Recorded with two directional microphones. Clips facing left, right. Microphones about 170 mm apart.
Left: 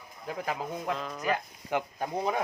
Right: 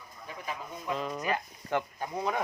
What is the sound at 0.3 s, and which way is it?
Speech, 85° left.